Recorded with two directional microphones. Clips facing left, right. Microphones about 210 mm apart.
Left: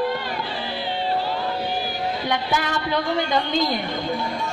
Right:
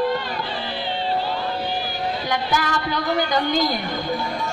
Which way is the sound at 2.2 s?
25° left (ahead or behind).